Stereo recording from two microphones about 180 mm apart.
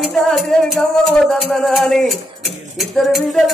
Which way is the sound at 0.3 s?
Centre (ahead or behind).